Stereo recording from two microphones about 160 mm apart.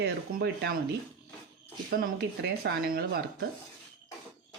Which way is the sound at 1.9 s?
75° right (ahead or behind).